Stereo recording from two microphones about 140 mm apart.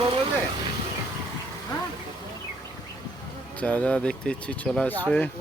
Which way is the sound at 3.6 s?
10° left (ahead or behind).